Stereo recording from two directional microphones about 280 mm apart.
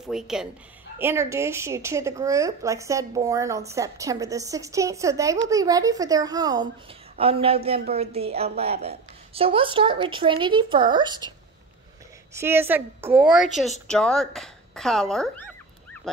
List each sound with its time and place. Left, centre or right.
0.0 s a woman's voice: centre
12.4 s a woman's voice: centre